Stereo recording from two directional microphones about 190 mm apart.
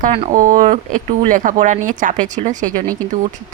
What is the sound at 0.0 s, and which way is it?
Speech, 35° right (ahead or behind).